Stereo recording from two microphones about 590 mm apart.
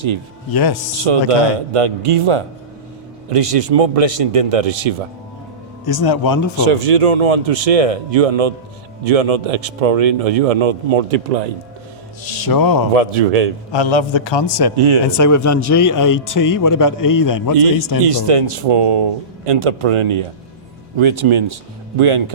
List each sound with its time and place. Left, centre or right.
0.5 s speech: left
1.3 s speech: right
5.8 s speech: left
6.7 s speech: right
12.5 s speech: left
12.9 s a man's voice: right
13.7 s a man's voice: left
14.8 s speech: right
15.2 s speech: left
18.0 s speech: right